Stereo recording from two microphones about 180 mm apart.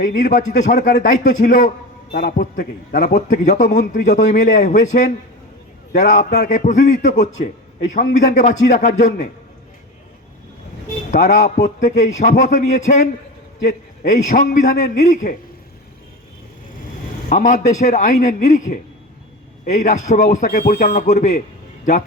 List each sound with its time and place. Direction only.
0.0 s a man's voice: 45° left (ahead or behind)
3.2 s a man's voice: 45° left (ahead or behind)
11.1 s a man's voice: 40° left (ahead or behind)
17.2 s a man's voice: 45° left (ahead or behind)